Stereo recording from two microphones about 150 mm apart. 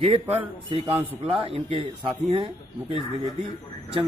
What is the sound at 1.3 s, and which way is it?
A man's voice, 40° right (ahead or behind).